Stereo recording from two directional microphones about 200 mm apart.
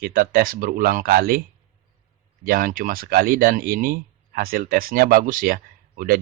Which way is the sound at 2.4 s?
45° right (ahead or behind).